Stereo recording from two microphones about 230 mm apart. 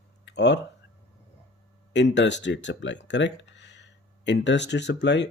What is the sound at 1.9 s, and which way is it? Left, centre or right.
Speech, left.